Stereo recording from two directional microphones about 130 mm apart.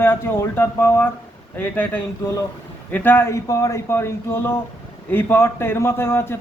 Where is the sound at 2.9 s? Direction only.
15° left (ahead or behind).